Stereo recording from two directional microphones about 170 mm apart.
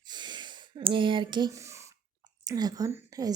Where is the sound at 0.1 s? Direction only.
25° right (ahead or behind).